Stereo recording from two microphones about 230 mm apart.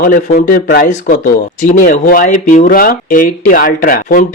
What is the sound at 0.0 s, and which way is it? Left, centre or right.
Speech, left.